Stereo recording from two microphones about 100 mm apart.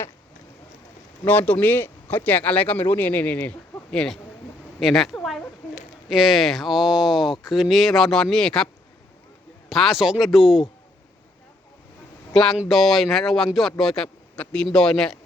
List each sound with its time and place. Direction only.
1.2 s speech: 20° left (ahead or behind)
4.8 s a sound: centre (ahead or behind)
6.1 s speech: 5° right (ahead or behind)
12.3 s speech: 5° left (ahead or behind)